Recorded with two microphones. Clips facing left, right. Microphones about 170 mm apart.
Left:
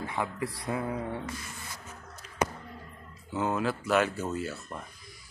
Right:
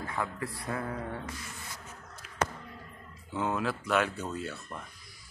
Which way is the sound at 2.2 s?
5° right (ahead or behind).